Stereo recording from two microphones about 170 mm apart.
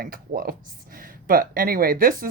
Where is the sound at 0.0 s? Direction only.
55° right (ahead or behind).